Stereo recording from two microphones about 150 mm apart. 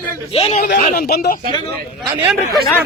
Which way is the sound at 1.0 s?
90° left.